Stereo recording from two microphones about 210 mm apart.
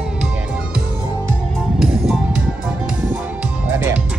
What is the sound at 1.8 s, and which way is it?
Music, centre (ahead or behind).